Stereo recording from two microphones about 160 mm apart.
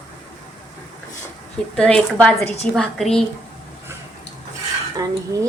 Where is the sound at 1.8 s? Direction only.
5° left (ahead or behind).